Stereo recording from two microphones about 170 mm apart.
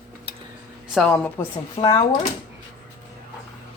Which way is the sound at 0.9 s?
5° left (ahead or behind).